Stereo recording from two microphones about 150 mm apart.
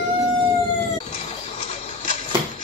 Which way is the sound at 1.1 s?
50° left (ahead or behind).